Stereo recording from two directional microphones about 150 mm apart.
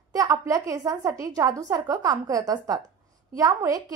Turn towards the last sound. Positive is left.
turn(degrees=-25)  # may be behind; listen again after turning